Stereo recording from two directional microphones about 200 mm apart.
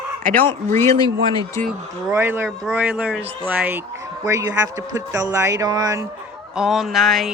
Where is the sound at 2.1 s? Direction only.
10° right (ahead or behind).